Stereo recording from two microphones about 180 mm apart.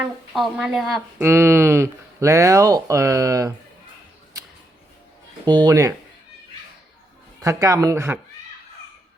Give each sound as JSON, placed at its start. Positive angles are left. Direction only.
{"t": 0.0, "sound": "speech", "side_deg": 0}
{"t": 1.2, "sound": "speech", "side_deg": -15}
{"t": 5.5, "sound": "speech", "side_deg": -25}
{"t": 7.4, "sound": "speech", "side_deg": -20}